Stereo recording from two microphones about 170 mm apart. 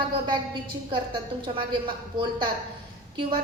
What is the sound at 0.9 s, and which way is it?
Speech, 30° right (ahead or behind).